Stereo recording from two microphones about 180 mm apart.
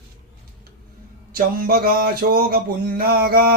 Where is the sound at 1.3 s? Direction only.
55° right (ahead or behind).